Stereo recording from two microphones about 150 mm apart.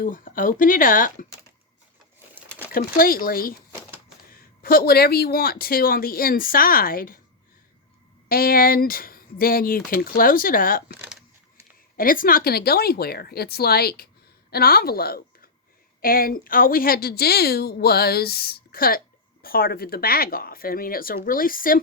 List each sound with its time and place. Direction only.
0.0 s speech: 65° left (ahead or behind)
2.7 s speech: 75° left (ahead or behind)
8.3 s speech: 75° left (ahead or behind)
11.9 s speech: 70° left (ahead or behind); by 15.4 s 90° left
16.0 s a woman's voice: 75° left (ahead or behind)